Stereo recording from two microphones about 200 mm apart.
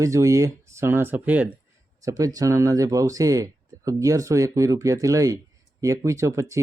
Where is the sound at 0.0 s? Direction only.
15° right (ahead or behind).